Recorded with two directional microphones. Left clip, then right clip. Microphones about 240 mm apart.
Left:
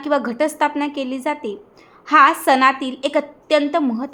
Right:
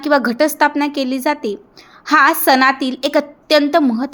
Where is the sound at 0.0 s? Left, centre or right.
Centre.